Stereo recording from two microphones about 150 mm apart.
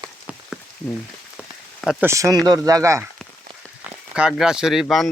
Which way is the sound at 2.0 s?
20° right (ahead or behind).